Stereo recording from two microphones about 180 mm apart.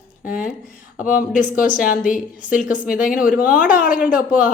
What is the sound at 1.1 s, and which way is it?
Speech, 50° left (ahead or behind).